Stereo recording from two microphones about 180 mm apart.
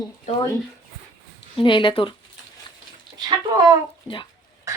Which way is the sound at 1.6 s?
25° left (ahead or behind).